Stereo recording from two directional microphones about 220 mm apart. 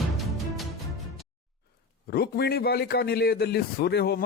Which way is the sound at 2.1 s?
45° left (ahead or behind).